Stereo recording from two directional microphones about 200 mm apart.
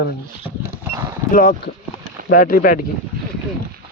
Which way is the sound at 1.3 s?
45° left (ahead or behind).